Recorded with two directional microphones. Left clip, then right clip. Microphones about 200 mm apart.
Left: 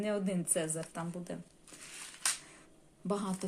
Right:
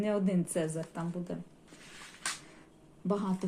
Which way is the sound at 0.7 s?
20° left (ahead or behind).